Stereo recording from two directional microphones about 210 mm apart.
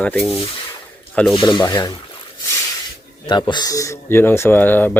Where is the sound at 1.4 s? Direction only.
20° left (ahead or behind).